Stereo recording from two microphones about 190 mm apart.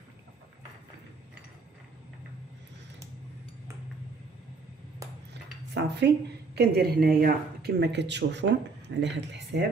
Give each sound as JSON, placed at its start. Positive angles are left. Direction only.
{"t": 5.7, "sound": "speech", "side_deg": -60}